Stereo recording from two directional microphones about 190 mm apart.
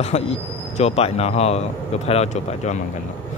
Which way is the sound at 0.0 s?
35° left (ahead or behind).